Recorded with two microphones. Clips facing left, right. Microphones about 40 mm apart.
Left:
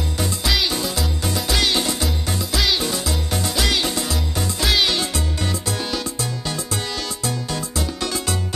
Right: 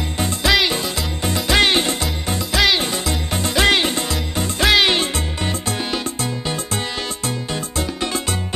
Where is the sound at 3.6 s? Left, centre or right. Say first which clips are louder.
Right 7 dB; right.